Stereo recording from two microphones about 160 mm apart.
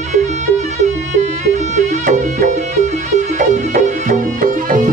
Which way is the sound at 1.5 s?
50° right (ahead or behind).